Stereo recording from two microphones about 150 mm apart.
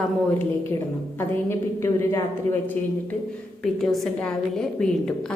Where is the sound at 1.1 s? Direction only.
15° left (ahead or behind).